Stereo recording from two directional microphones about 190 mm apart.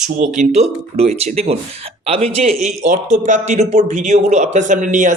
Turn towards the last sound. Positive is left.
turn(degrees=-40)  # may be behind; listen again after turning